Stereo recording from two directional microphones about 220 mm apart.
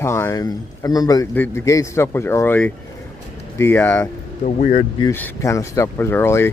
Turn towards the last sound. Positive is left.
turn(degrees=10)  # may be behind; listen again after turning